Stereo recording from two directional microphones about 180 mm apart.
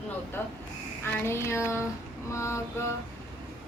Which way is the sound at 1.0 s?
15° left (ahead or behind).